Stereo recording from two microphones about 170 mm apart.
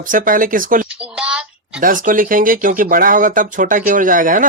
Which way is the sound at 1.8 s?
55° right (ahead or behind).